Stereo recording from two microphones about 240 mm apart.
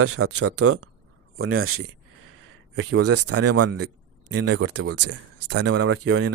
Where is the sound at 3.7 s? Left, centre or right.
Right.